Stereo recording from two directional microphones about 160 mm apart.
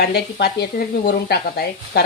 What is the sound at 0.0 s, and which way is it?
Speech, 80° left.